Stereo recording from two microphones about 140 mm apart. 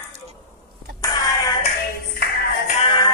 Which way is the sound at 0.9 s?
25° left (ahead or behind).